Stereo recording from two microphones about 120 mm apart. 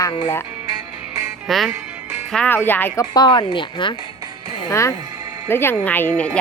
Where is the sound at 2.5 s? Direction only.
15° left (ahead or behind).